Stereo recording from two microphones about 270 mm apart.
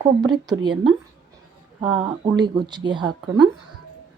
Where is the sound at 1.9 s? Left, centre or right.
Centre.